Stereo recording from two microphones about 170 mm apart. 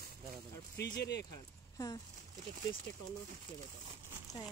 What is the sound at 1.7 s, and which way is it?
Speech, 20° left (ahead or behind).